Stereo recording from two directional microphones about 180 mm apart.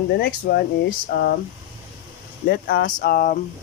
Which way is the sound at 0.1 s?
65° left (ahead or behind).